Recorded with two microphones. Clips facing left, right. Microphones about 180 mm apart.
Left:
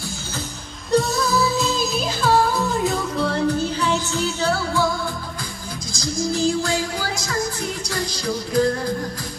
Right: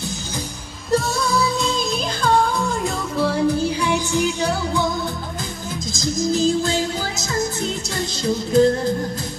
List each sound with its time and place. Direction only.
0.9 s music: centre (ahead or behind); by 4.8 s 15° right (ahead or behind)
5.9 s music: 20° right (ahead or behind)